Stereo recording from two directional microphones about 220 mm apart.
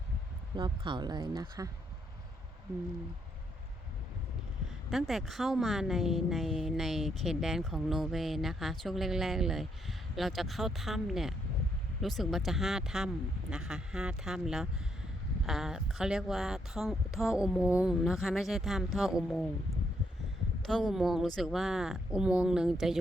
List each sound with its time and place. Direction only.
0.5 s speech: 20° right (ahead or behind)
4.9 s a woman's voice: centre (ahead or behind)
20.7 s a woman's voice: centre (ahead or behind)